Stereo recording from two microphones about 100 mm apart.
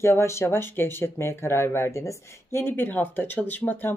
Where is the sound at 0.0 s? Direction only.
25° left (ahead or behind).